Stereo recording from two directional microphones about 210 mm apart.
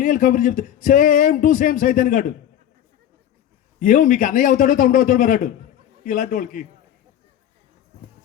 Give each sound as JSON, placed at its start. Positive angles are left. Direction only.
{"t": 0.0, "sound": "speech", "side_deg": 40}
{"t": 3.8, "sound": "speech", "side_deg": 40}